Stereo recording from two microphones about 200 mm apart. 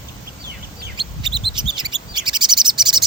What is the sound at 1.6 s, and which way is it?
Chirp, 20° right (ahead or behind).